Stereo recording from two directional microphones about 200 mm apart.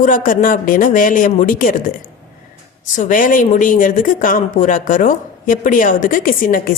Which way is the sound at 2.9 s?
40° left (ahead or behind).